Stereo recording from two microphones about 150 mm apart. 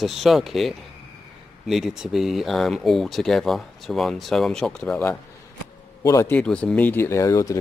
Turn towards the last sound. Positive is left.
turn(degrees=20)  # may be behind; listen again after turning